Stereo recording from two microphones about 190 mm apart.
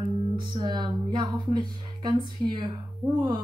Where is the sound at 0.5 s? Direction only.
20° right (ahead or behind).